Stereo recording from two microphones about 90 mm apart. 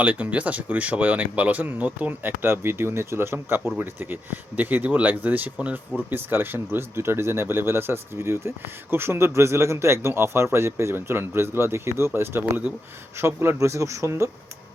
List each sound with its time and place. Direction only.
0.0 s speech: 15° right (ahead or behind); by 14.3 s 35° right (ahead or behind)